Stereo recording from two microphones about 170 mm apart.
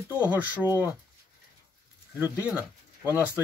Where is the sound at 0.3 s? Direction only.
10° right (ahead or behind).